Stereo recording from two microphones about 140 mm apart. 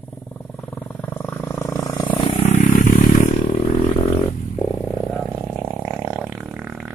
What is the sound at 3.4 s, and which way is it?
Roaring cats, 40° left (ahead or behind).